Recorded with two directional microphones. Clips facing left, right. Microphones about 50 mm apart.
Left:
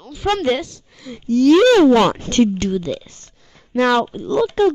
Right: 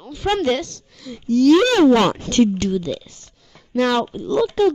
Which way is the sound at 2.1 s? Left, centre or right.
Left.